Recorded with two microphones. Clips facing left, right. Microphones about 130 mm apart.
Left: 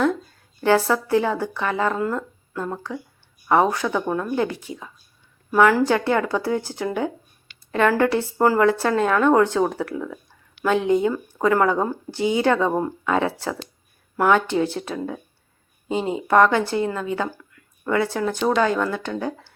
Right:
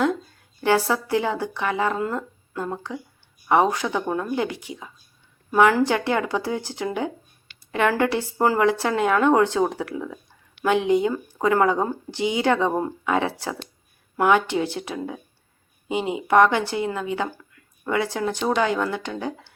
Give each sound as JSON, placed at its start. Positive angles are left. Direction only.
{"t": 0.6, "sound": "speech", "side_deg": -15}